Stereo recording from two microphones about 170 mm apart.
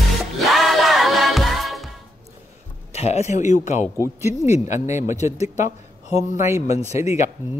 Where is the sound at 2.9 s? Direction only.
40° left (ahead or behind).